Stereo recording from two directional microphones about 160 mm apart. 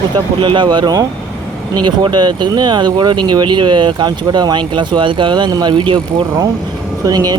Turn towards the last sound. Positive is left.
turn(degrees=-25)  # may be behind; listen again after turning